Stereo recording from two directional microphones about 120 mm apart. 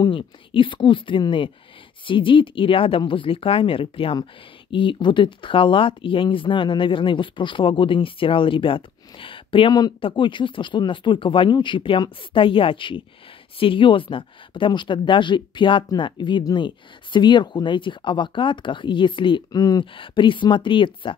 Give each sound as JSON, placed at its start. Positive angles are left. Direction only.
{"t": 0.0, "sound": "speech", "side_deg": 45}
{"t": 19.8, "sound": "speech", "side_deg": 45}